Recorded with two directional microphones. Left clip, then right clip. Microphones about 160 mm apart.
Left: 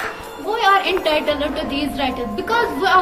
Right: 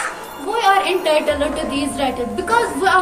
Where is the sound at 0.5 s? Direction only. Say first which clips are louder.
Right 1 dB; 15° right (ahead or behind).